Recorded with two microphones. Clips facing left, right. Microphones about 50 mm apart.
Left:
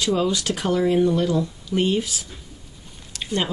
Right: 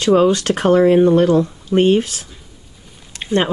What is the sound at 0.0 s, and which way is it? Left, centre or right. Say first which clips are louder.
Speech: right 9 dB; right.